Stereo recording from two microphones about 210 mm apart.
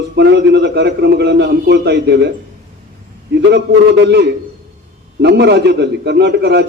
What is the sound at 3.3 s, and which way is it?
A man's voice, 55° right (ahead or behind).